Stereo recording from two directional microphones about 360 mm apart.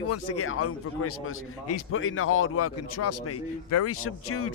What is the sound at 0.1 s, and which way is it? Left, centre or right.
Speech, left.